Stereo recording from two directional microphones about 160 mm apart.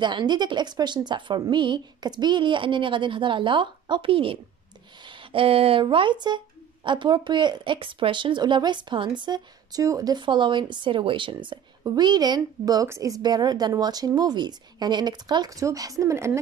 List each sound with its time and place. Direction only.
0.0 s speech: 30° right (ahead or behind)